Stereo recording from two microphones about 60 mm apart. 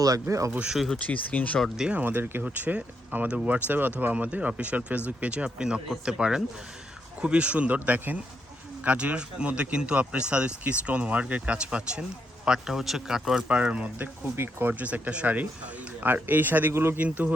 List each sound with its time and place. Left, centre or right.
0.0 s speech: right
0.9 s speech: left
1.9 s speech: right; by 13.4 s centre
13.5 s speech: right
14.3 s speech: right
16.7 s speech: right
17.0 s speech: right